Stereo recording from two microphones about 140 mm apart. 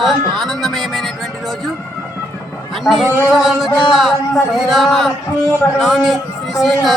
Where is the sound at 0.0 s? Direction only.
Centre (ahead or behind).